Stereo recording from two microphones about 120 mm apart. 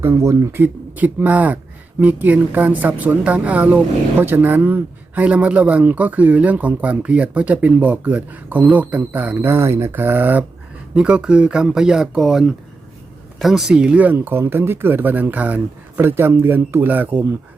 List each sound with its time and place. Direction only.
0.0 s a woman's voice: 20° right (ahead or behind)